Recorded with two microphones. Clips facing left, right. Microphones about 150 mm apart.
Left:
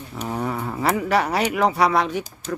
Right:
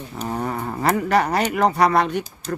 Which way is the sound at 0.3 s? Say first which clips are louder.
Even; centre (ahead or behind).